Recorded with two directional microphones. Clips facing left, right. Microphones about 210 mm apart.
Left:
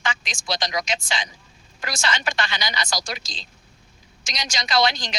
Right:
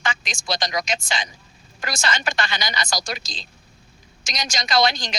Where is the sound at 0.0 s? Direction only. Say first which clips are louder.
Right 1 dB; 45° right (ahead or behind).